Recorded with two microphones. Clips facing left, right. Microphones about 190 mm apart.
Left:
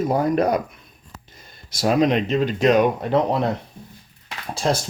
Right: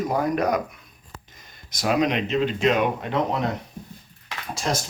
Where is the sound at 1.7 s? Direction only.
30° left (ahead or behind).